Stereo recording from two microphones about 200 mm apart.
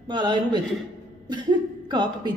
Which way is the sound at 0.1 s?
20° right (ahead or behind).